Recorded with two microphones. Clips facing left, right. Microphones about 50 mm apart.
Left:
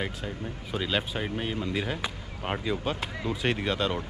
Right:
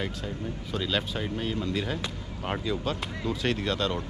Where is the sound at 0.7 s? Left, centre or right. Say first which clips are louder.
Left 1 dB; centre.